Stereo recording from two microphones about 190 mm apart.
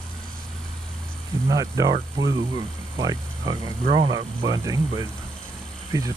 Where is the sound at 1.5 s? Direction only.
20° right (ahead or behind).